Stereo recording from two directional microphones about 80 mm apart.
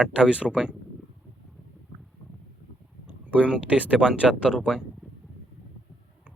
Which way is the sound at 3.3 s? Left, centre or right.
Centre.